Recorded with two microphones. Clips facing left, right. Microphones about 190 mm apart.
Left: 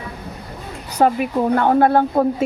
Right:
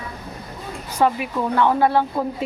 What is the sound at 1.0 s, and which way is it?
Speech, 45° left (ahead or behind).